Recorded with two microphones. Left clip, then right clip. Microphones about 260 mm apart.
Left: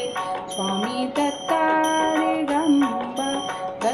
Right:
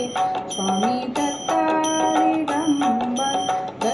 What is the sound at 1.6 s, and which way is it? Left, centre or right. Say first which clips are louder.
Music: left 3 dB; left.